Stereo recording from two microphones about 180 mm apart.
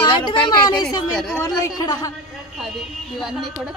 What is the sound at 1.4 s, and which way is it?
Speech, 20° left (ahead or behind).